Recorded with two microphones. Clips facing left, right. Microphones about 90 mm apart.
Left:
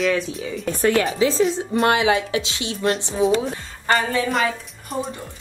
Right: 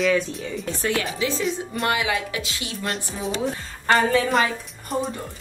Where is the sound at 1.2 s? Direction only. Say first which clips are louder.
Left 6 dB; 35° left (ahead or behind).